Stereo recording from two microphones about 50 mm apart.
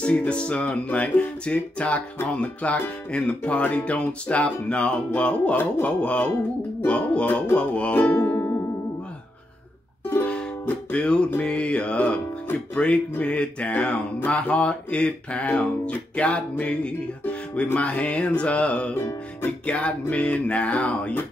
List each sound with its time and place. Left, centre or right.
0.0 s mantra: left
5.6 s music: left
5.9 s mantra: left
7.9 s music: left
8.3 s music: left
10.2 s music: centre
11.4 s mantra: left